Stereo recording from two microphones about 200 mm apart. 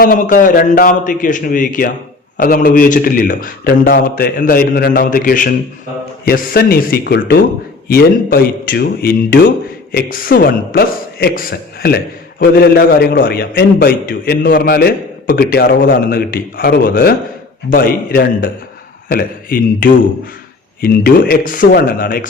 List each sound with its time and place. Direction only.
0.0 s a man's voice: 45° left (ahead or behind)